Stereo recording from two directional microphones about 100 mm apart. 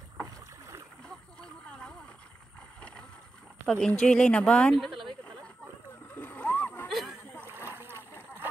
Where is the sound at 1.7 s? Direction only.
10° left (ahead or behind).